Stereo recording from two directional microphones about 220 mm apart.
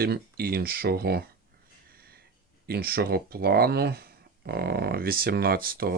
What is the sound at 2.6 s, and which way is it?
Speech, 45° right (ahead or behind).